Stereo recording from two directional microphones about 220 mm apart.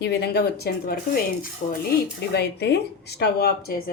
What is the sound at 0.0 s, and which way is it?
Speech, 50° left (ahead or behind).